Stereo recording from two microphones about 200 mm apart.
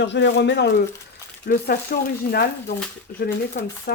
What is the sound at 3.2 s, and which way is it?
Speech, 50° left (ahead or behind).